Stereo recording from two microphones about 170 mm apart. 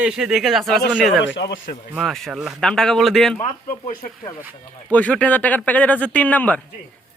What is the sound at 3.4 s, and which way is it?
Speech, 55° left (ahead or behind).